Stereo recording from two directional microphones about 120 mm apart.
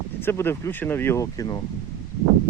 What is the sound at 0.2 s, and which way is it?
Speech, 20° left (ahead or behind).